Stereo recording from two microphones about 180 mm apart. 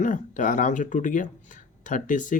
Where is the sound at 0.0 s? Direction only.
45° left (ahead or behind).